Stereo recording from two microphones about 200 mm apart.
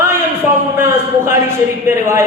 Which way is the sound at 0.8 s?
10° right (ahead or behind).